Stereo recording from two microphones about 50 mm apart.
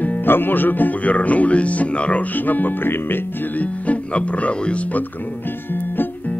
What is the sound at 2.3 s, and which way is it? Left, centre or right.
Music, left.